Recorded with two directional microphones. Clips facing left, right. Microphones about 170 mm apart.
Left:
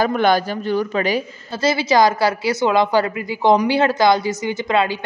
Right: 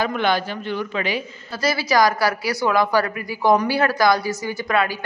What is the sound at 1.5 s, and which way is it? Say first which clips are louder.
A woman's voice: left 3 dB; 25° left (ahead or behind).